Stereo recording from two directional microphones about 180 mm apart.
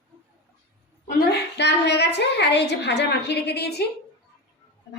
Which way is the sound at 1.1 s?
65° left (ahead or behind).